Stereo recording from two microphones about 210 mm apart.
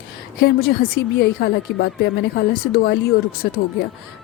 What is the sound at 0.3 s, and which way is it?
Speech, 45° left (ahead or behind).